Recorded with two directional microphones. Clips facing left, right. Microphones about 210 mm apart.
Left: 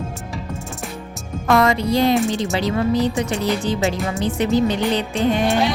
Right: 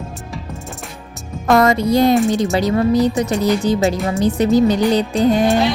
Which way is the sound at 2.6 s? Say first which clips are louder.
Right 3 dB; 40° right (ahead or behind).